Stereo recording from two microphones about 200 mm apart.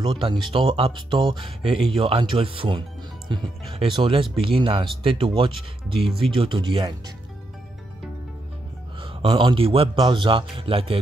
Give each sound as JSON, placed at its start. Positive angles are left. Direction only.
{"t": 0.0, "sound": "speech", "side_deg": -25}
{"t": 3.9, "sound": "speech", "side_deg": -25}
{"t": 9.0, "sound": "speech", "side_deg": -25}